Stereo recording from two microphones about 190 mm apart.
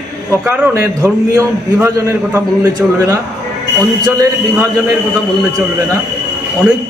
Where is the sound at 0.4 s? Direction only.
10° right (ahead or behind).